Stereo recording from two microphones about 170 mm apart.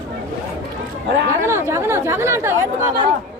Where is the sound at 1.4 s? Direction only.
15° right (ahead or behind).